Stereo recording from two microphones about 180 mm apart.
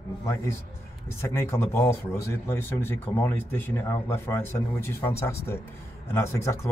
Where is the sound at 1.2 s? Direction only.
15° left (ahead or behind).